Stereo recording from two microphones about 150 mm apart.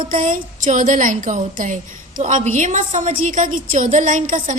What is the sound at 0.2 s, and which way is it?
A woman's voice, 60° right (ahead or behind).